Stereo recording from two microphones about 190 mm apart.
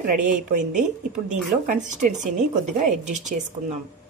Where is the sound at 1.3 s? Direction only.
40° right (ahead or behind).